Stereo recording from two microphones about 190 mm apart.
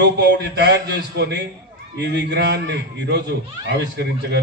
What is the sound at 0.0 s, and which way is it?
A man's voice, 60° right (ahead or behind).